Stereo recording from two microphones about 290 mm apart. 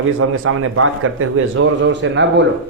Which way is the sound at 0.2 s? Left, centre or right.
Right.